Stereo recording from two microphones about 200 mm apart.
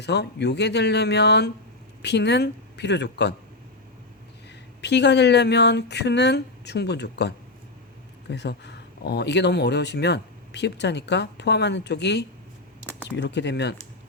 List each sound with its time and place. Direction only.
0.0 s speech: 55° left (ahead or behind)
4.8 s speech: 60° left (ahead or behind)